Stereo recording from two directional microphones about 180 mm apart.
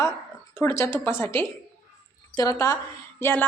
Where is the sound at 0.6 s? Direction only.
15° left (ahead or behind).